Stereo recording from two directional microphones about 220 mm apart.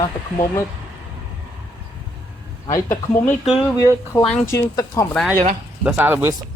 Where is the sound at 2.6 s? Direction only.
15° left (ahead or behind).